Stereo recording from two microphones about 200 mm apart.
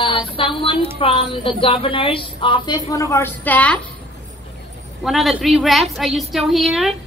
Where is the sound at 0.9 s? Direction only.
25° left (ahead or behind); by 3.7 s 10° left (ahead or behind).